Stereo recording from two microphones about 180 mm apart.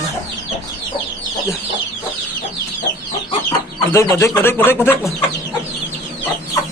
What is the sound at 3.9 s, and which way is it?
Speech, 15° left (ahead or behind).